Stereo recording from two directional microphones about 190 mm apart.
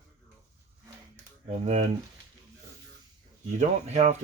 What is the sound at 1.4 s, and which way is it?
Speech, 35° right (ahead or behind).